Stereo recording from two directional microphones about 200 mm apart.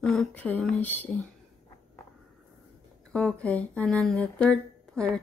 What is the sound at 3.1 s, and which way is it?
Speech, 5° left (ahead or behind).